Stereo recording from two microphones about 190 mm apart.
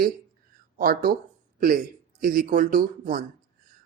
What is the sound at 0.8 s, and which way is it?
Speech, 50° right (ahead or behind).